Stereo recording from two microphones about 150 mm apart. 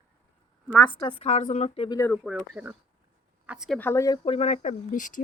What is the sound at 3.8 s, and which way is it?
Speech, 15° left (ahead or behind).